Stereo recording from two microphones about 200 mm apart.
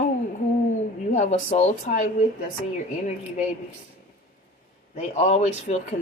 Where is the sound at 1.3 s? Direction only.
35° left (ahead or behind).